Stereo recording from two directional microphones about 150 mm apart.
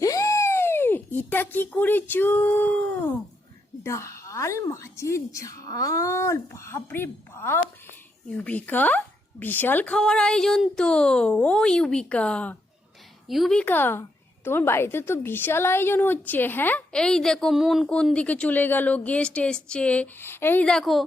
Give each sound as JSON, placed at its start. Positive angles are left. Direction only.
{"t": 0.0, "sound": "a child's voice", "side_deg": 20}
{"t": 3.8, "sound": "a woman's voice", "side_deg": 20}